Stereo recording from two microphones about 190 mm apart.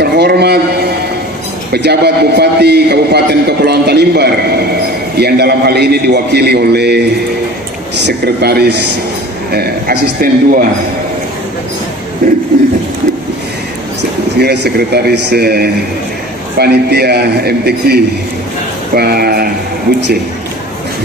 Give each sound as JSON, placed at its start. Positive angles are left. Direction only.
{"t": 0.0, "sound": "a man's voice", "side_deg": -60}
{"t": 12.2, "sound": "a man's voice", "side_deg": -45}
{"t": 14.4, "sound": "a man's voice", "side_deg": -60}